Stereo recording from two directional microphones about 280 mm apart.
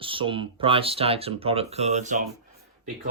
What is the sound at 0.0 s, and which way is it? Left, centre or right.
Speech, centre.